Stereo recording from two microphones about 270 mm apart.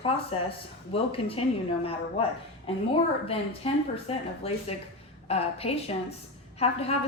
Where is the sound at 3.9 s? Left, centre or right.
Left.